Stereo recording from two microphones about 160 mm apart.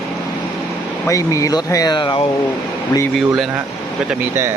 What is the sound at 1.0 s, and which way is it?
Speech, 20° left (ahead or behind).